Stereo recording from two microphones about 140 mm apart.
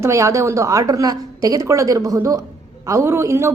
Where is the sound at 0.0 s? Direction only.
20° right (ahead or behind).